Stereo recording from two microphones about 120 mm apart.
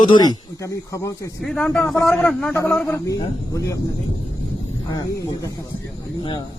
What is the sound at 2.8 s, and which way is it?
Speech, 25° left (ahead or behind).